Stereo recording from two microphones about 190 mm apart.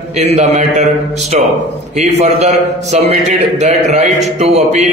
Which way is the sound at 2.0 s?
35° right (ahead or behind).